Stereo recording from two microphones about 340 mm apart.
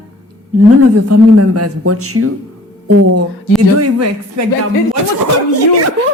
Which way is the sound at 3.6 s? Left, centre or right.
Right.